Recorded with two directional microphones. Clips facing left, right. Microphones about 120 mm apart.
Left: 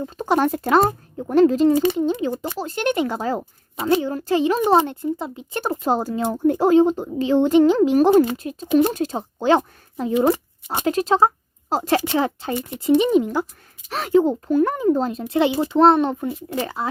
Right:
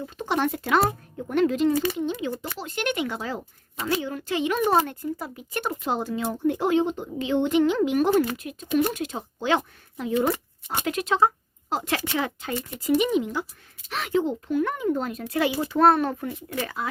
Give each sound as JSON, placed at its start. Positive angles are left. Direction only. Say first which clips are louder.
{"t": 0.0, "sound": "speech", "louder": "left 6 dB", "side_deg": 40}
{"t": 1.7, "sound": "speech", "louder": "left 6 dB", "side_deg": 20}
{"t": 2.0, "sound": "speech", "louder": "left 6 dB", "side_deg": 35}
{"t": 4.6, "sound": "speech", "louder": "left 5 dB", "side_deg": 25}
{"t": 10.3, "sound": "a sound", "louder": "left 4 dB", "side_deg": 20}
{"t": 10.8, "sound": "speech", "louder": "left 5 dB", "side_deg": 35}
{"t": 13.1, "sound": "speech", "louder": "left 6 dB", "side_deg": 40}